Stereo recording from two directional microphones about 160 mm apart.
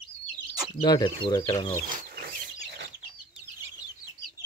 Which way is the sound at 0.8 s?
30° left (ahead or behind).